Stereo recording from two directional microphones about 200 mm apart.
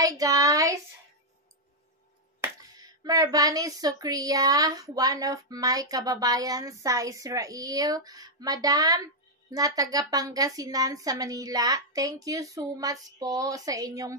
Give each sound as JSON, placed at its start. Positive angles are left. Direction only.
{"t": 0.0, "sound": "speech", "side_deg": -15}
{"t": 2.4, "sound": "speech", "side_deg": -20}